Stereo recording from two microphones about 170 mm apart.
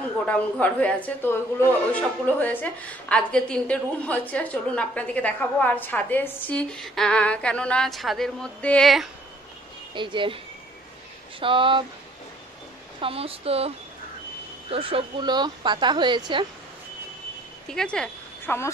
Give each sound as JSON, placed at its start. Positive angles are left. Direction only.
{"t": 0.3, "sound": "a woman's voice", "side_deg": 10}
{"t": 9.9, "sound": "a woman's voice", "side_deg": -30}
{"t": 13.0, "sound": "a woman's voice", "side_deg": -35}
{"t": 17.6, "sound": "speech", "side_deg": 5}